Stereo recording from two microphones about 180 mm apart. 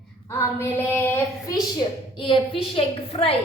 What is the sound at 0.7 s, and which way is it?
A woman's voice, 10° left (ahead or behind).